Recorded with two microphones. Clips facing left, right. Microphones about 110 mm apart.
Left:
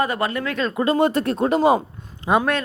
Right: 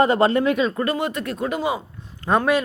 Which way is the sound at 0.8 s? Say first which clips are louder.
Left 5 dB; 30° left (ahead or behind).